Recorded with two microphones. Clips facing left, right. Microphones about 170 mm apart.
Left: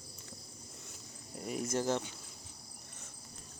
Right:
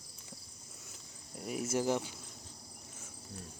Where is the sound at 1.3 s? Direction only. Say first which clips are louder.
Right 1 dB; centre (ahead or behind).